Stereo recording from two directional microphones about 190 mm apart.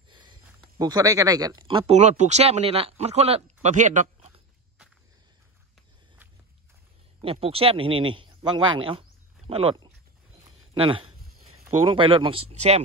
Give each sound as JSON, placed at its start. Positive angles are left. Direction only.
{"t": 0.1, "sound": "speech", "side_deg": -25}
{"t": 7.2, "sound": "speech", "side_deg": -30}
{"t": 10.4, "sound": "a sound", "side_deg": -25}
{"t": 11.4, "sound": "speech", "side_deg": -30}